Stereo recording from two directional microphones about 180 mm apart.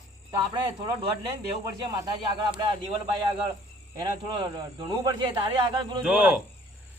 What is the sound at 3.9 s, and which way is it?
Speech, 25° right (ahead or behind).